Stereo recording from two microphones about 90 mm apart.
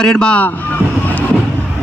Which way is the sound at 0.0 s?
10° left (ahead or behind).